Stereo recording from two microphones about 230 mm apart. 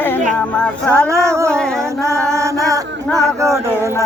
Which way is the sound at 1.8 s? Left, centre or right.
Centre.